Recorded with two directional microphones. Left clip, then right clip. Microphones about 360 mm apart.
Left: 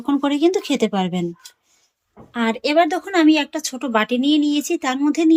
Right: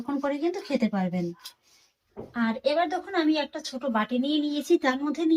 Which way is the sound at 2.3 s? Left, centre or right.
Left.